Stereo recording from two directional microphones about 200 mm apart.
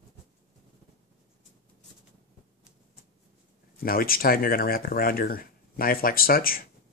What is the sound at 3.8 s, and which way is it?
Speech, 45° left (ahead or behind).